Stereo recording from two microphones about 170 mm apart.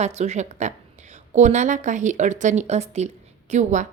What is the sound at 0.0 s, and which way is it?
Speech, 40° right (ahead or behind).